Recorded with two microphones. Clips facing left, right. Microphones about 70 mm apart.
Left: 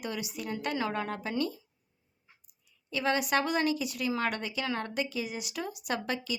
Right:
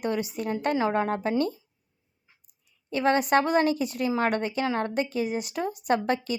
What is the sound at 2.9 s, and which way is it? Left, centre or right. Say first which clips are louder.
Speech: right 6 dB; right.